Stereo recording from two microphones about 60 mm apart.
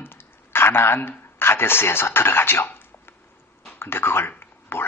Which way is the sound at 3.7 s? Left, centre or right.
Left.